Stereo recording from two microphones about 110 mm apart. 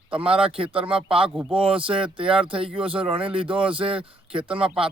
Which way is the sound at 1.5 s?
55° right (ahead or behind).